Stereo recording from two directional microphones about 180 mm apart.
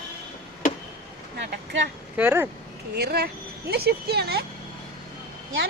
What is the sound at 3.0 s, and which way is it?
Speech, 60° right (ahead or behind).